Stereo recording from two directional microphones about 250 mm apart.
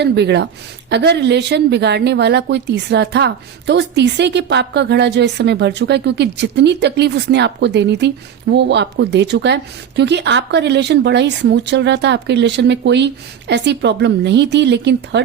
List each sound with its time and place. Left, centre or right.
0.0 s a woman's voice: right